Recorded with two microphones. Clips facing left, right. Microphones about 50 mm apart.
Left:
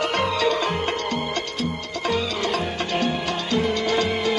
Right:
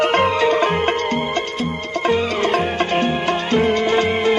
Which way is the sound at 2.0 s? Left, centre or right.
Right.